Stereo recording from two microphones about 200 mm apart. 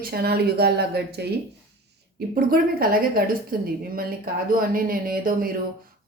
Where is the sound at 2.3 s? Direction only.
50° right (ahead or behind).